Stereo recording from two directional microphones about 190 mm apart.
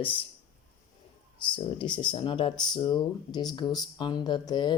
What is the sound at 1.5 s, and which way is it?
Speech, 25° left (ahead or behind).